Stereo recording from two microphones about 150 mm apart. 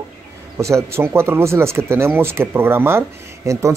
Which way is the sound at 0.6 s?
20° right (ahead or behind).